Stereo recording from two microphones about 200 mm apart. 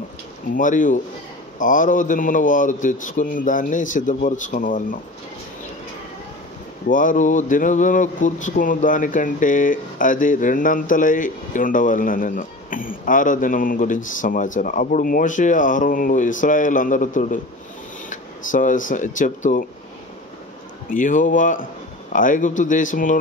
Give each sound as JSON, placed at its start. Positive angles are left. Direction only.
{"t": 0.6, "sound": "speech", "side_deg": 40}
{"t": 6.9, "sound": "speech", "side_deg": 40}
{"t": 20.9, "sound": "speech", "side_deg": 40}